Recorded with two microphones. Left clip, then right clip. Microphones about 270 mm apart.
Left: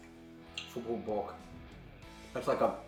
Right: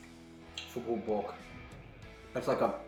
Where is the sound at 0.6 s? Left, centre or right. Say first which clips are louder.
Left 1 dB; centre.